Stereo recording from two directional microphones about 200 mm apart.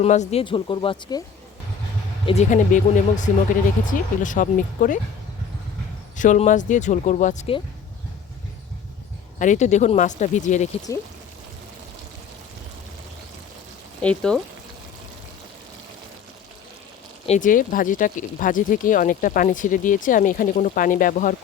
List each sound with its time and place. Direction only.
0.0 s speech: 35° left (ahead or behind)
2.2 s speech: 35° left (ahead or behind)
6.1 s speech: 40° left (ahead or behind)
9.4 s speech: 35° left (ahead or behind)
14.0 s speech: 5° left (ahead or behind)
17.2 s speech: 40° left (ahead or behind)